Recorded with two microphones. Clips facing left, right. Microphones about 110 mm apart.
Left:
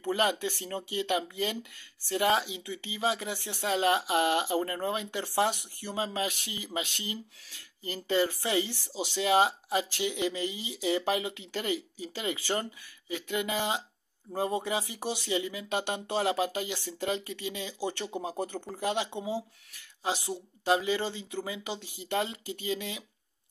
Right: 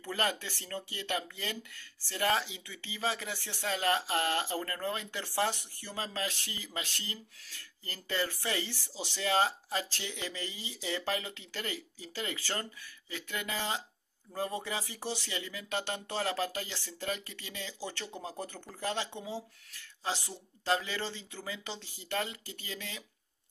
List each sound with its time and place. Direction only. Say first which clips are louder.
0.0 s speech: left 6 dB; 20° left (ahead or behind)